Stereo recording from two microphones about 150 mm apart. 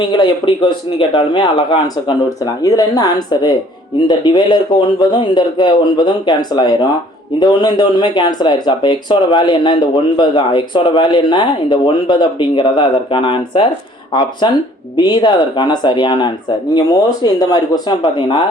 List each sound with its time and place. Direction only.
0.0 s speech: 30° left (ahead or behind)
2.4 s speech: 25° left (ahead or behind)